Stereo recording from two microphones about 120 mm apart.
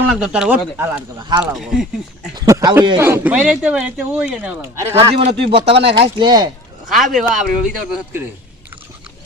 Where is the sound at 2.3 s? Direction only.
30° right (ahead or behind).